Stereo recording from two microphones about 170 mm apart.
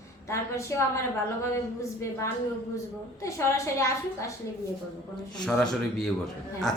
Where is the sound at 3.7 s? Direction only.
20° left (ahead or behind).